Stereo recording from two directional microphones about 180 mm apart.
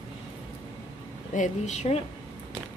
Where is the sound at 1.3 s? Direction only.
45° left (ahead or behind).